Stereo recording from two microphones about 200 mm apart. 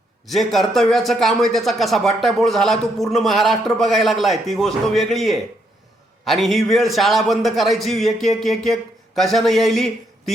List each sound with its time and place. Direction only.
0.3 s a man's voice: centre (ahead or behind)